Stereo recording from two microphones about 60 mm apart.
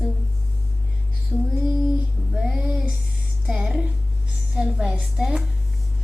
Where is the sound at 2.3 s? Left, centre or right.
Right.